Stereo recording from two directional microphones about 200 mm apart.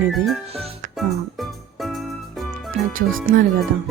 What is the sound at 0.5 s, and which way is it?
Speech, 30° right (ahead or behind).